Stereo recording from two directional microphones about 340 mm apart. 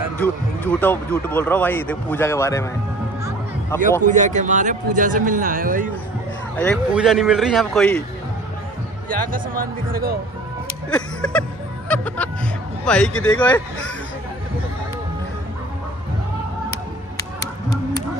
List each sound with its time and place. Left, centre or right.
0.2 s speech: centre
4.0 s speech: right
6.6 s speech: centre
9.1 s speech: right
10.9 s music: centre
12.8 s speech: centre